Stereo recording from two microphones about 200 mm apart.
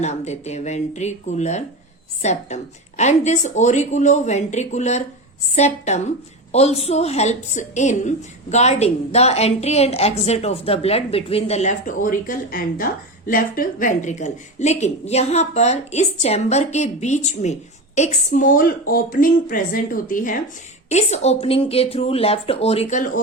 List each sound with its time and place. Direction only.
0.0 s a woman's voice: 35° left (ahead or behind)